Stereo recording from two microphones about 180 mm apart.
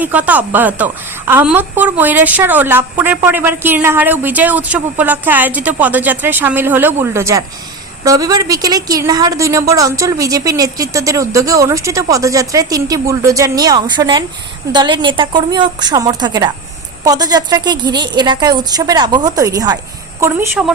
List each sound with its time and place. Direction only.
0.0 s a woman's voice: 10° right (ahead or behind)